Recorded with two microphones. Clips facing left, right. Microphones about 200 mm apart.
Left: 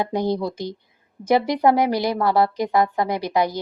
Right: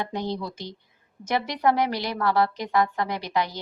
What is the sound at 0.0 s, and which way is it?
A woman's voice, 10° left (ahead or behind).